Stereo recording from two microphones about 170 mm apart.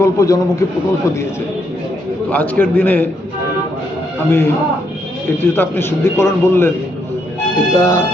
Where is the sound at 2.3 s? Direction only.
10° left (ahead or behind).